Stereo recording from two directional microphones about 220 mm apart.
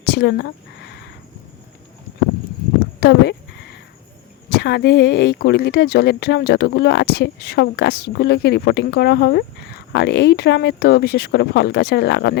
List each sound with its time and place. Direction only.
0.0 s a sound: 50° left (ahead or behind)
3.0 s speech: 50° left (ahead or behind)
4.4 s speech: 50° left (ahead or behind)